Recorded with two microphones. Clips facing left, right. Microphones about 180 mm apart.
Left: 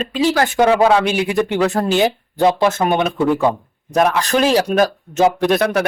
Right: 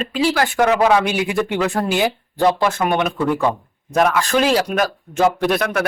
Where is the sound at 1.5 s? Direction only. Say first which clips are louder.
Left 3 dB; 35° left (ahead or behind).